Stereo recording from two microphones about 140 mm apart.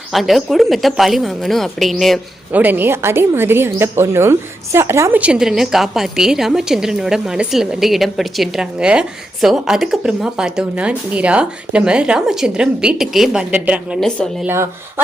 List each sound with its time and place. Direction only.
0.1 s a woman's voice: centre (ahead or behind)
2.5 s a woman's voice: 15° right (ahead or behind)